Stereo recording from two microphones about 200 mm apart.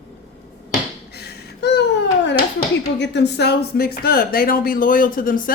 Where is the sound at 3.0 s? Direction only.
60° left (ahead or behind).